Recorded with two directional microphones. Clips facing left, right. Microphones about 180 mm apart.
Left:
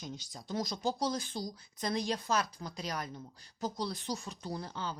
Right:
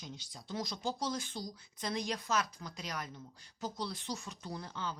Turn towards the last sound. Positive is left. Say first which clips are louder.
# left 2 dB
turn(degrees=35)  # may be behind; listen again after turning